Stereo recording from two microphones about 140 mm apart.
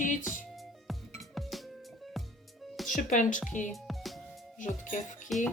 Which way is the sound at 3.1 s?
65° left (ahead or behind).